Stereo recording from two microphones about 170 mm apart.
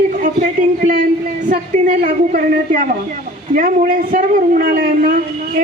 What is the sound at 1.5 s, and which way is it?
Speech, 50° right (ahead or behind).